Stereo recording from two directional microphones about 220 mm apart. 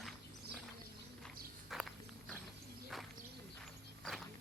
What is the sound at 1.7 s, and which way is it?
Walk, centre (ahead or behind).